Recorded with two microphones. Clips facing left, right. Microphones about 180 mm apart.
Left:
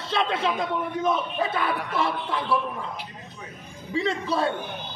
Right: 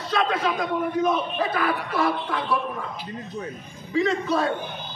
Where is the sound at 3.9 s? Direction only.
30° left (ahead or behind).